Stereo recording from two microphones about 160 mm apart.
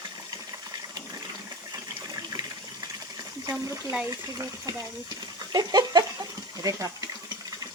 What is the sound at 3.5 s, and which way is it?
Speech, 20° right (ahead or behind).